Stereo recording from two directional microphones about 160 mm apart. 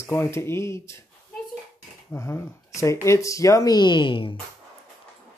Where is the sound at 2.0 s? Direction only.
15° left (ahead or behind); by 4.4 s 30° left (ahead or behind).